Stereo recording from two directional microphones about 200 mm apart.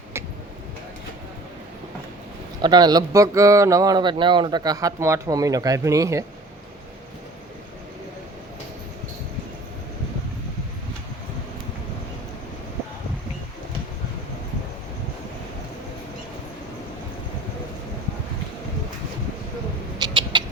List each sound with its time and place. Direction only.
2.6 s speech: 20° right (ahead or behind)
20.0 s cat: 25° right (ahead or behind)